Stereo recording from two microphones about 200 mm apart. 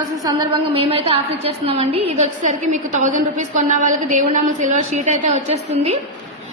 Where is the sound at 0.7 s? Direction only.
30° right (ahead or behind).